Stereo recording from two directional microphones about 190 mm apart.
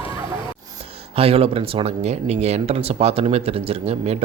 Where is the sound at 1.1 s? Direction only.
30° right (ahead or behind).